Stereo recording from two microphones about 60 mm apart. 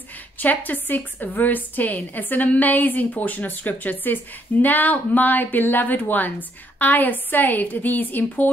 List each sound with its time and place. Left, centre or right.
0.4 s a woman's voice: left